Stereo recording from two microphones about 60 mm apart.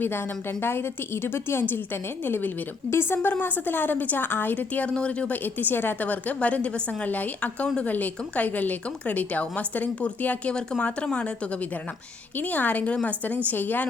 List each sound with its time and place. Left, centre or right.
0.6 s a woman's voice: left
4.9 s speech: centre
5.3 s speech: left
10.5 s speech: centre
12.4 s speech: left